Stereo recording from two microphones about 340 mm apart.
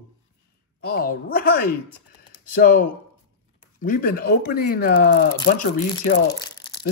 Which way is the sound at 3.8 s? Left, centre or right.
Left.